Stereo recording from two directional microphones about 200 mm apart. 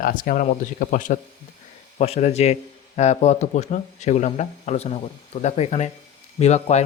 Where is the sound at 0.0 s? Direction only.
45° left (ahead or behind).